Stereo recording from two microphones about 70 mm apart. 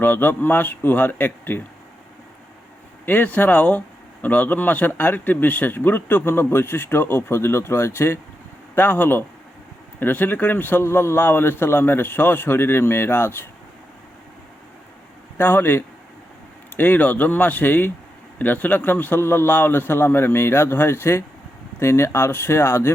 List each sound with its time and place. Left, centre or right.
0.0 s speech: left
3.1 s speech: left
8.7 s a man's voice: left
15.4 s a man's voice: left